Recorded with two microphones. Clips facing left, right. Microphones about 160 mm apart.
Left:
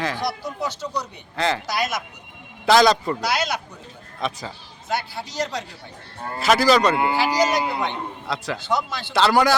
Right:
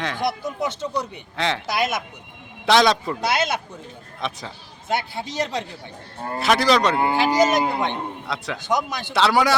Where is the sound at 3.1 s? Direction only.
25° right (ahead or behind).